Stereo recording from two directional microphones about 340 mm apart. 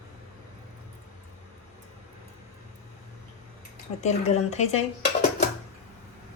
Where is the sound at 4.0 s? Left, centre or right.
Centre.